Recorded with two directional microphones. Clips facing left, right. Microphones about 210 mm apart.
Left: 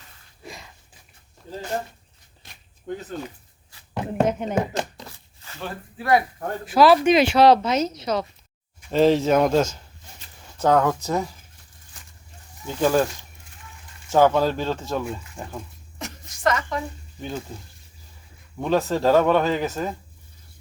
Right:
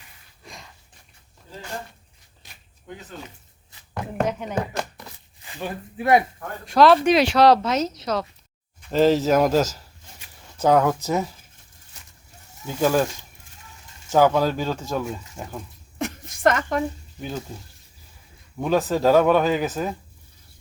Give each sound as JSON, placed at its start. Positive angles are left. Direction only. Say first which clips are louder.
{"t": 0.4, "sound": "a sound", "louder": "left 4 dB", "side_deg": 0}
{"t": 3.9, "sound": "speech", "louder": "left 3 dB", "side_deg": 20}
{"t": 5.4, "sound": "speech", "louder": "right 3 dB", "side_deg": -15}
{"t": 6.7, "sound": "a man's voice", "louder": "even", "side_deg": 5}
{"t": 12.6, "sound": "speech", "louder": "even", "side_deg": -5}
{"t": 14.1, "sound": "speech", "louder": "even", "side_deg": 0}
{"t": 16.0, "sound": "a sound", "louder": "right 8 dB", "side_deg": -55}
{"t": 18.5, "sound": "speech", "louder": "even", "side_deg": 0}